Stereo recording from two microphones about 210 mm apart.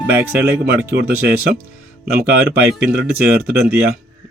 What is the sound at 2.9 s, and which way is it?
Speech, 50° right (ahead or behind).